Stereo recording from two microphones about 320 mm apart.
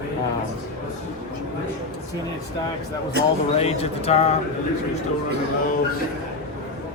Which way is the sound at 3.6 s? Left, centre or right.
Centre.